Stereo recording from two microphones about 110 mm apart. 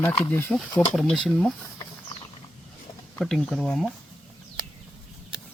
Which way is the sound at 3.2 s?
5° left (ahead or behind).